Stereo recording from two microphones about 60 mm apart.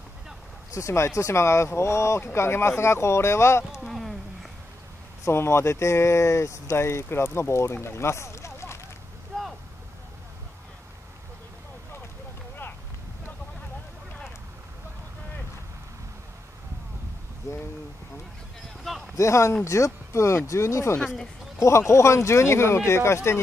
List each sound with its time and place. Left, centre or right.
0.7 s speech: left
3.8 s a sound: centre
5.2 s speech: left
9.3 s vehicle: centre
19.1 s speech: left